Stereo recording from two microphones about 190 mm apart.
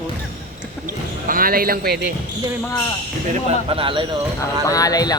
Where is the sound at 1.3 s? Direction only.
50° right (ahead or behind).